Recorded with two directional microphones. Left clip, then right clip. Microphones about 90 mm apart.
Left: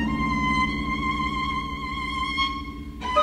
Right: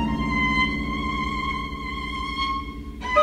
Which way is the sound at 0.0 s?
30° left (ahead or behind).